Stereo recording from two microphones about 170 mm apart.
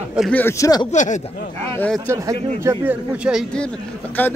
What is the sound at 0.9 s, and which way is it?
Speech, 45° left (ahead or behind).